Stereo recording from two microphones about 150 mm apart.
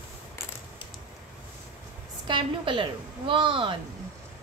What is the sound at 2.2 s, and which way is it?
A woman's voice, 30° right (ahead or behind).